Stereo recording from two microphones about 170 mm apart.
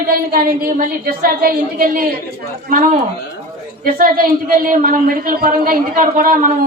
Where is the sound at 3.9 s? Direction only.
55° right (ahead or behind).